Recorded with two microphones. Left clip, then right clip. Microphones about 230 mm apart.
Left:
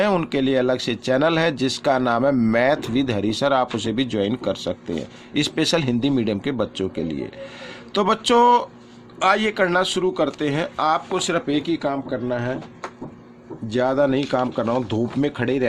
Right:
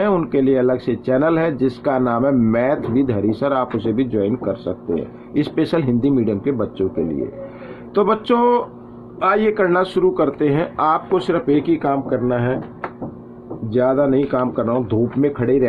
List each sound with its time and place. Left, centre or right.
0.0 s speech: left
7.9 s speech: left
13.7 s speech: left